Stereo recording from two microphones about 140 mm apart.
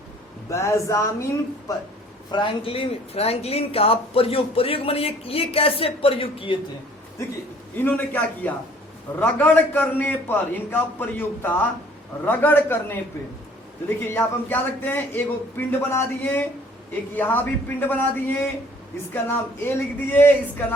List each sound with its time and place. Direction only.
0.5 s speech: 20° left (ahead or behind)
2.3 s speech: 35° left (ahead or behind)
7.8 s a man's voice: 15° left (ahead or behind)
14.1 s a man's voice: 15° left (ahead or behind)